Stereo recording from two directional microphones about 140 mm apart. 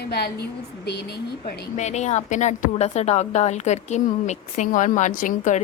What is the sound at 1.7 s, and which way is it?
A woman's voice, 55° left (ahead or behind).